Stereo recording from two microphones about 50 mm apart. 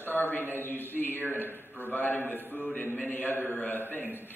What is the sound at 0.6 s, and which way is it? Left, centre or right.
A man's voice, left.